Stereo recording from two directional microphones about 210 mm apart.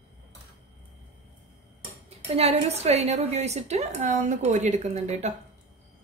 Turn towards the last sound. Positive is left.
turn(degrees=-30)  # may be behind; listen again after turning